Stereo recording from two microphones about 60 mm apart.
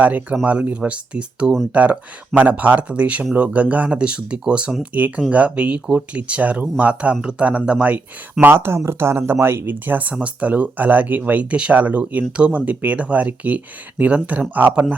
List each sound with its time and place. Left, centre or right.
0.0 s speech: right